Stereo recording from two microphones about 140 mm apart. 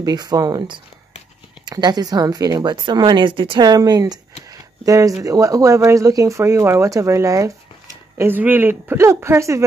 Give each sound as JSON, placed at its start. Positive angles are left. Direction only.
{"t": 0.0, "sound": "speech", "side_deg": -30}